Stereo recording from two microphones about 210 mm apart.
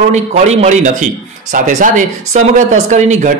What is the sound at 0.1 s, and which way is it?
A man's voice, 30° right (ahead or behind).